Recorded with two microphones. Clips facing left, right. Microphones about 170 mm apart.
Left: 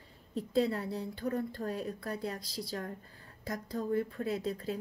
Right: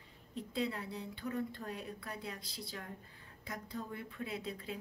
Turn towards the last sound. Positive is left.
turn(degrees=40)  # may be behind; listen again after turning